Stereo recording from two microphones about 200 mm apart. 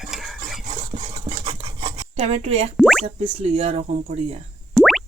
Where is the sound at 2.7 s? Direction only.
5° right (ahead or behind).